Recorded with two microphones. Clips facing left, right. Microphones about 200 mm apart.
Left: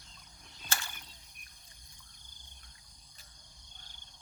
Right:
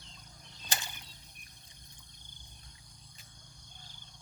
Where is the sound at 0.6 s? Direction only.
20° right (ahead or behind).